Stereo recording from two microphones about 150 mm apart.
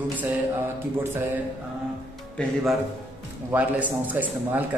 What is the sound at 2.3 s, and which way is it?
A man's voice, centre (ahead or behind).